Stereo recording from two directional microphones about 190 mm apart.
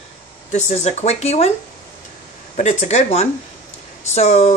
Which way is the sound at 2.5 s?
35° left (ahead or behind).